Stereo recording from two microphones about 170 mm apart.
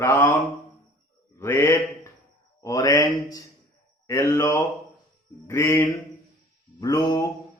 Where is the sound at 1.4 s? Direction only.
15° left (ahead or behind).